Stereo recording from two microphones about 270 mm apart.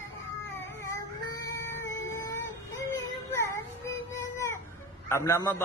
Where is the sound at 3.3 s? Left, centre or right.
Centre.